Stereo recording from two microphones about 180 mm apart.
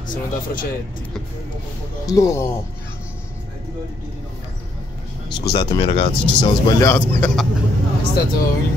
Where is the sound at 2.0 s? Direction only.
20° left (ahead or behind).